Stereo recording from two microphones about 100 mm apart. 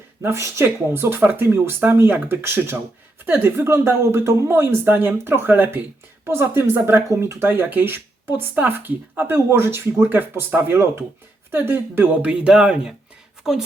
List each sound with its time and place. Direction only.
0.2 s speech: 25° right (ahead or behind)
12.2 s a woman's voice: 10° right (ahead or behind)